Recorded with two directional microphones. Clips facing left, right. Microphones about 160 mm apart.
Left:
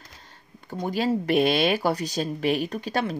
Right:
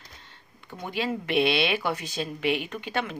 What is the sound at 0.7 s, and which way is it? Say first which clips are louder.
Speech: left 5 dB; 40° left (ahead or behind).